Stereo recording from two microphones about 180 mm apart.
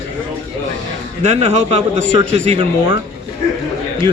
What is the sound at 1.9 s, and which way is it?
Speech, 70° left (ahead or behind).